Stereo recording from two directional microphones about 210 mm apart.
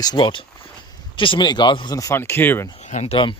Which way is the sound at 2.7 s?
35° left (ahead or behind).